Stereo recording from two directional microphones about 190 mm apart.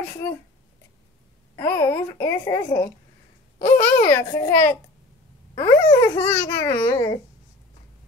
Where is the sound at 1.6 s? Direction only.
15° left (ahead or behind).